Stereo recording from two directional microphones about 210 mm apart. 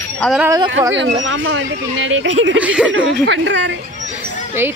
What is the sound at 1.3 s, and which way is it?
Speech, 60° right (ahead or behind).